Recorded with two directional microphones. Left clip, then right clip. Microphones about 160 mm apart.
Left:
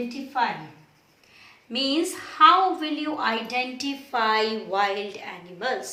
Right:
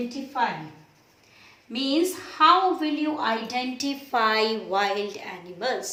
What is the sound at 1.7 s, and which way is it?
A woman's voice, 35° right (ahead or behind).